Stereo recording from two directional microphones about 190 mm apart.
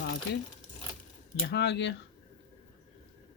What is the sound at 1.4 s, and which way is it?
Speech, 75° left (ahead or behind).